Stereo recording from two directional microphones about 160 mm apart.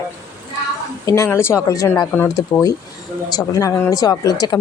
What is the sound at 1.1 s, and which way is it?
Speech, 20° left (ahead or behind).